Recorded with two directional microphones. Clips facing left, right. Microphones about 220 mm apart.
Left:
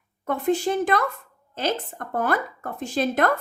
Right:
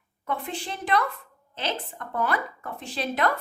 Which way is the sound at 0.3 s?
45° left (ahead or behind).